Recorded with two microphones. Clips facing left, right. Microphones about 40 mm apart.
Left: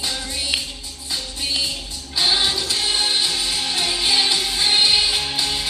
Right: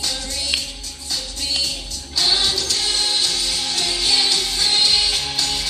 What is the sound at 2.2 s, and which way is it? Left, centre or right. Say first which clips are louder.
Music: even; centre.